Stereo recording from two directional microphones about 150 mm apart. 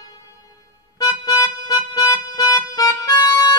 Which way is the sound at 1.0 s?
25° left (ahead or behind).